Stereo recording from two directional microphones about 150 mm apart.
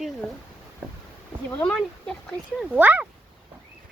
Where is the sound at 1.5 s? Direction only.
10° left (ahead or behind).